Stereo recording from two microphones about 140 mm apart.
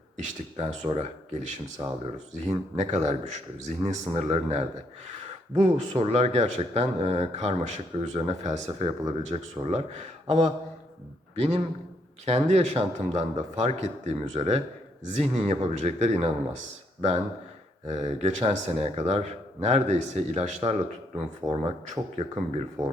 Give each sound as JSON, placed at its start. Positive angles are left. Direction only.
{"t": 0.2, "sound": "speech", "side_deg": -55}
{"t": 5.6, "sound": "speech", "side_deg": -55}
{"t": 21.4, "sound": "speech", "side_deg": -35}
{"t": 21.8, "sound": "speech", "side_deg": -50}